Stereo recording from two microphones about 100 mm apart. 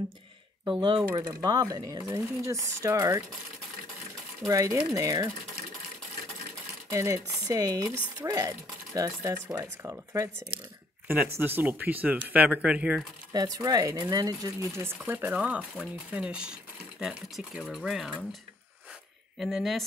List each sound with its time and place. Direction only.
0.7 s speech: 55° right (ahead or behind)
1.1 s speech: 40° right (ahead or behind)
4.5 s speech: 30° right (ahead or behind)
6.9 s speech: 30° right (ahead or behind); by 13.0 s 10° right (ahead or behind)
13.3 s speech: 40° right (ahead or behind)
15.0 s speech: 20° right (ahead or behind)
19.3 s speech: centre (ahead or behind)